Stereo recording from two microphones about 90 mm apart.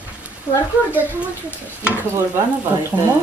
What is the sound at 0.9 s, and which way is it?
Speech, 15° right (ahead or behind).